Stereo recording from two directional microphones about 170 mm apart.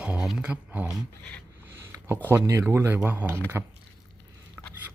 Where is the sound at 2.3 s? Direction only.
15° right (ahead or behind).